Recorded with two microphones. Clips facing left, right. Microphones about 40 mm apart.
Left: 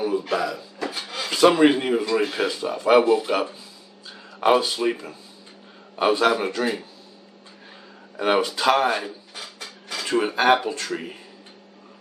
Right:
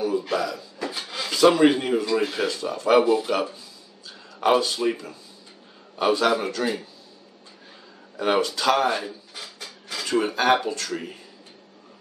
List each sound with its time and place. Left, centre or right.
0.3 s a sound: centre
0.9 s rub: centre
1.3 s speech: left
8.2 s speech: centre